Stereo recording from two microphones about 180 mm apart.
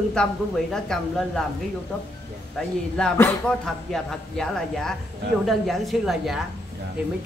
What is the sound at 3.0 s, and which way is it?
Speech, 5° left (ahead or behind).